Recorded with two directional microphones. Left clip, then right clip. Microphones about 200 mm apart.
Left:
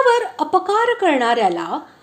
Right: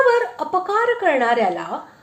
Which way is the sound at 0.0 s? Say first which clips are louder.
Left 1 dB; 35° left (ahead or behind).